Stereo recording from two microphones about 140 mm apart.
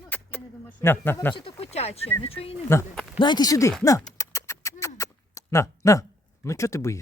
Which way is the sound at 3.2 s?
30° left (ahead or behind).